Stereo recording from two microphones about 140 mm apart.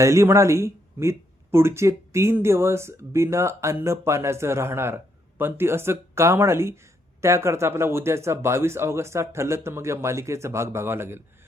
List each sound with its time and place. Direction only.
0.0 s speech: 20° right (ahead or behind)